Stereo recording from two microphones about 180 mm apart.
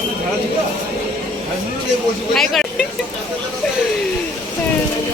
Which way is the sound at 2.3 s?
Centre (ahead or behind).